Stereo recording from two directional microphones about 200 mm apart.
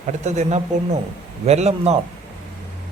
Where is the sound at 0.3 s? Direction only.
35° right (ahead or behind).